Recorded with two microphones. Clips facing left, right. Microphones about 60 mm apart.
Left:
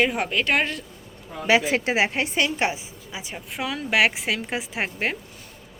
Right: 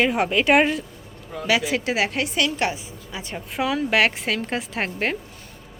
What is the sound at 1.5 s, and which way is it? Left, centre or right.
Speech, left.